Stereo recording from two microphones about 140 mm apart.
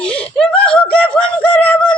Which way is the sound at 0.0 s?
5° left (ahead or behind).